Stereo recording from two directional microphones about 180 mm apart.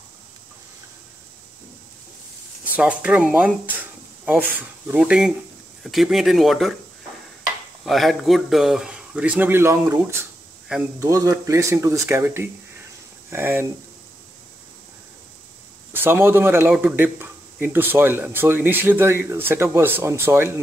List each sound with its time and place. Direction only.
2.7 s a man's voice: 5° right (ahead or behind)
4.2 s a sound: 10° right (ahead or behind)
4.6 s speech: 10° right (ahead or behind)
7.8 s speech: centre (ahead or behind)
11.0 s a man's voice: 15° right (ahead or behind)
15.9 s a man's voice: 10° right (ahead or behind)